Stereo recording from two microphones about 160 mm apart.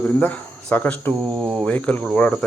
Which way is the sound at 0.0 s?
10° left (ahead or behind).